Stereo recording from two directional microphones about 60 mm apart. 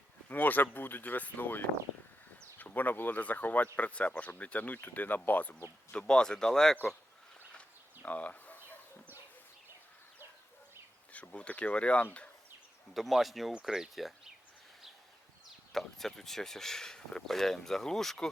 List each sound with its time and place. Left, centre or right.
0.3 s speech: left
5.9 s speech: centre
8.0 s speech: left
11.1 s speech: left
12.9 s speech: centre
15.7 s speech: centre